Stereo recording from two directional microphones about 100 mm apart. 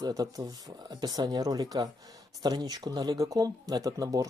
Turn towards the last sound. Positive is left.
turn(degrees=-40)  # may be behind; listen again after turning